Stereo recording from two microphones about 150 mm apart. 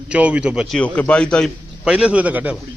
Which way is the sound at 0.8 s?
10° left (ahead or behind).